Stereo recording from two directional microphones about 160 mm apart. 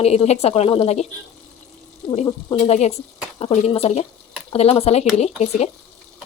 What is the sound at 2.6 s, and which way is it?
Speech, 40° left (ahead or behind).